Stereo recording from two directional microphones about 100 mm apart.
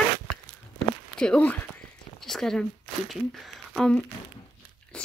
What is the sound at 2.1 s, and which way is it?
Speech, 5° left (ahead or behind).